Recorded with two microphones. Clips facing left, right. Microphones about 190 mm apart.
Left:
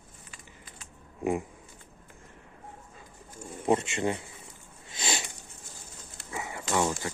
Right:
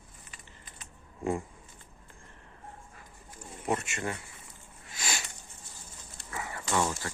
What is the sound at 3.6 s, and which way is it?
Pigeon, 25° left (ahead or behind).